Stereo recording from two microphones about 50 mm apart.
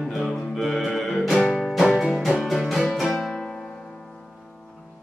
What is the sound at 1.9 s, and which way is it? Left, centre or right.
Music, centre.